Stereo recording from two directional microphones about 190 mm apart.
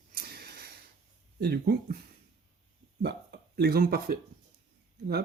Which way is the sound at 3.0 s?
60° right (ahead or behind).